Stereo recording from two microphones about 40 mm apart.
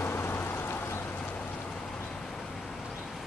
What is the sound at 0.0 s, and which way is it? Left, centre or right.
Vehicle, left.